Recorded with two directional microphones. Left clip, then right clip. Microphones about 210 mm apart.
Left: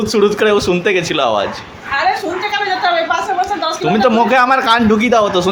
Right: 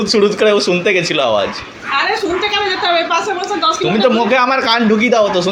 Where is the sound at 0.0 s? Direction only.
10° left (ahead or behind).